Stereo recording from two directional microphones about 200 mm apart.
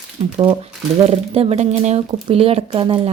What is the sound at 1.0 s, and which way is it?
Speech, 30° right (ahead or behind).